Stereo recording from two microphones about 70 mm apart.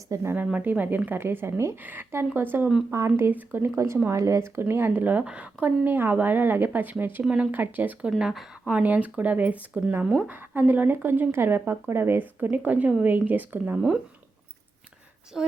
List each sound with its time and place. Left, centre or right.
0.1 s speech: right
0.5 s speech: right
1.8 s speech: right
4.9 s speech: right
8.2 s speech: centre
8.6 s speech: right
15.3 s speech: centre